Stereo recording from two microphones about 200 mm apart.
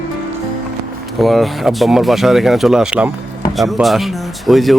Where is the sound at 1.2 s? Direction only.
Centre (ahead or behind).